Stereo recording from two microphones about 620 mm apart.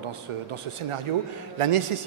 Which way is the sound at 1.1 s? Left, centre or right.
Right.